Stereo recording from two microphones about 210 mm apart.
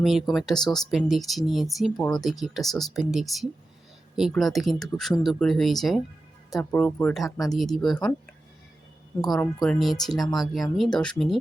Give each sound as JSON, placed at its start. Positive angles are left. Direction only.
{"t": 0.0, "sound": "speech", "side_deg": 0}
{"t": 7.3, "sound": "speech", "side_deg": 15}
{"t": 7.5, "sound": "speech", "side_deg": 0}
{"t": 9.3, "sound": "speech", "side_deg": 5}